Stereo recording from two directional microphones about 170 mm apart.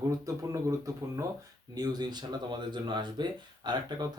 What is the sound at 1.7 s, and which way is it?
Speech, 25° right (ahead or behind).